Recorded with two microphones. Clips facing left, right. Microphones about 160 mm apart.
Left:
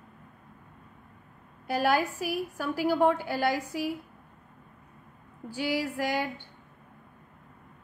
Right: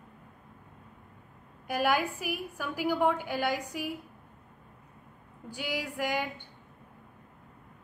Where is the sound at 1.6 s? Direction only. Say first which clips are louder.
Left 2 dB; 15° right (ahead or behind).